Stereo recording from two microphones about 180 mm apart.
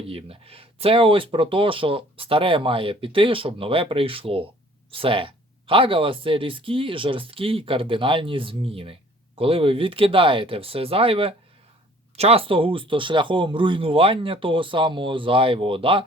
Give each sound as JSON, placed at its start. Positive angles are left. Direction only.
{"t": 0.0, "sound": "speech", "side_deg": -30}